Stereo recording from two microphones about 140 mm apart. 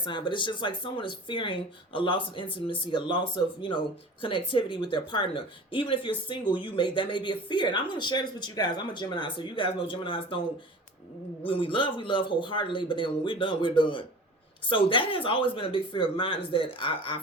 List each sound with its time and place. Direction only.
0.0 s speech: 35° left (ahead or behind)
4.2 s speech: 40° left (ahead or behind)
11.4 s speech: 40° left (ahead or behind)